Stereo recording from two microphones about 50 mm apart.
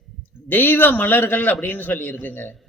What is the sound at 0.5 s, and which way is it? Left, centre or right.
A man's voice, left.